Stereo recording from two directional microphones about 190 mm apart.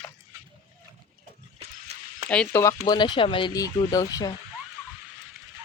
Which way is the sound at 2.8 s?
20° left (ahead or behind).